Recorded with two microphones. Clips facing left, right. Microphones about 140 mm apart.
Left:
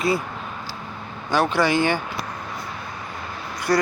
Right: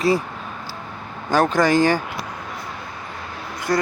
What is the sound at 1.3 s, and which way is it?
Speech, 45° right (ahead or behind).